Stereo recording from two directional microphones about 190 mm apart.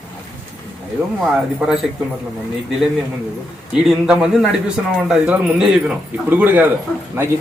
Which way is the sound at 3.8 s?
5° right (ahead or behind).